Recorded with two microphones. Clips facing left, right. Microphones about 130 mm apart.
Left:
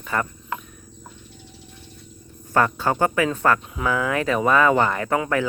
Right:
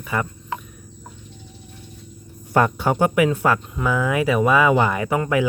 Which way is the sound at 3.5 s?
Centre (ahead or behind).